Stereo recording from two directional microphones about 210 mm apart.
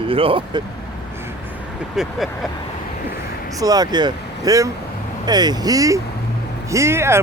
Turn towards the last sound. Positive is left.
turn(degrees=-10)  # may be behind; listen again after turning